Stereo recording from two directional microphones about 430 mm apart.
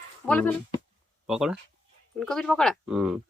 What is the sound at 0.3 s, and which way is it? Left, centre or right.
A child's voice, centre.